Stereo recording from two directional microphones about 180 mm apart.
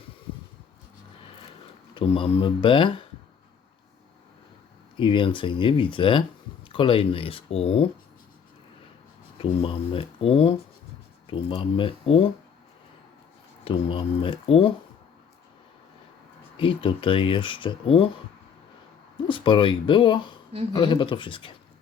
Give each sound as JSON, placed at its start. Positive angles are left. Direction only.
{"t": 2.0, "sound": "speech", "side_deg": 30}
{"t": 4.9, "sound": "speech", "side_deg": 25}
{"t": 9.4, "sound": "speech", "side_deg": 30}
{"t": 13.7, "sound": "speech", "side_deg": 30}
{"t": 16.6, "sound": "speech", "side_deg": 30}
{"t": 19.1, "sound": "speech", "side_deg": 25}